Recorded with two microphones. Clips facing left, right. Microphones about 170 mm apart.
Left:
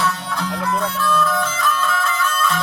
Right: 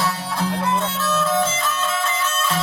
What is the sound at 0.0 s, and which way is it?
Music, 35° right (ahead or behind).